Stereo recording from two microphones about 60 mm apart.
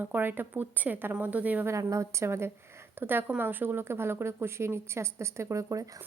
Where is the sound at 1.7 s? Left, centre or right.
Right.